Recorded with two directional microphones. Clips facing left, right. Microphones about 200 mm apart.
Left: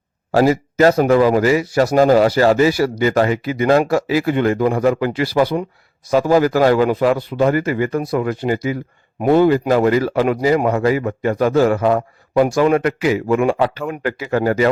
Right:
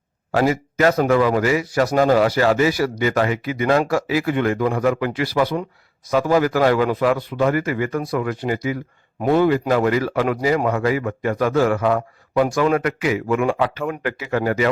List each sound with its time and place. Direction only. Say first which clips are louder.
0.3 s speech: left 4 dB; 35° left (ahead or behind)